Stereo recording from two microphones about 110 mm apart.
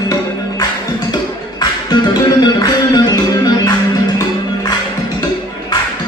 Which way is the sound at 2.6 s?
40° left (ahead or behind).